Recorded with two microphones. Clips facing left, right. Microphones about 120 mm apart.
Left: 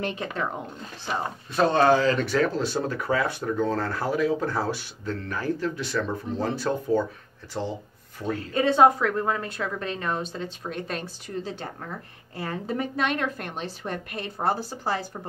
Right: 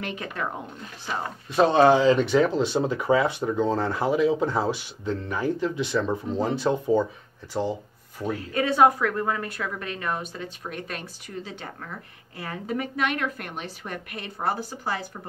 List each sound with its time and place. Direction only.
0.0 s a woman's voice: 30° left (ahead or behind)
1.5 s speech: 15° right (ahead or behind)
8.5 s a woman's voice: 25° left (ahead or behind)